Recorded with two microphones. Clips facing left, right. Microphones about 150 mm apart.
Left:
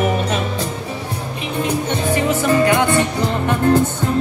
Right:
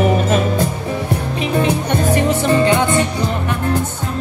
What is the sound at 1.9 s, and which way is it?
Music, 45° right (ahead or behind).